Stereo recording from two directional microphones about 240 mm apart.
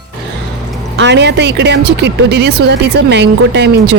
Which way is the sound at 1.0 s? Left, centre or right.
Right.